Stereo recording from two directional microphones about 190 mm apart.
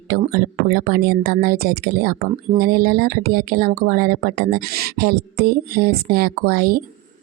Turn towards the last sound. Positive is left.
turn(degrees=-50)  # may be behind; listen again after turning